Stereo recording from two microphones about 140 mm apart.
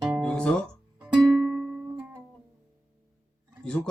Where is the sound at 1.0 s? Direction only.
5° right (ahead or behind).